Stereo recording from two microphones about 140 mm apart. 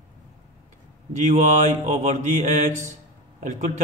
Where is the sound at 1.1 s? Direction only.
60° right (ahead or behind).